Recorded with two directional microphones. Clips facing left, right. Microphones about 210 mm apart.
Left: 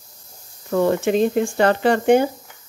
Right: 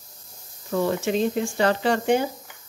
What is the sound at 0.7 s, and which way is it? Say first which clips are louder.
Speech: left 5 dB; 55° left (ahead or behind).